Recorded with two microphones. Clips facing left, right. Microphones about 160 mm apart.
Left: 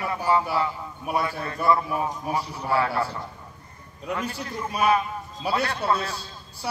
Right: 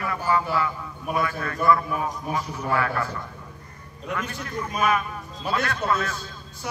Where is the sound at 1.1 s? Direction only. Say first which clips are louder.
Right 1 dB; 30° left (ahead or behind).